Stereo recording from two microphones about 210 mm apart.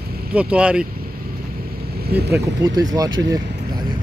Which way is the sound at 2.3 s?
15° right (ahead or behind).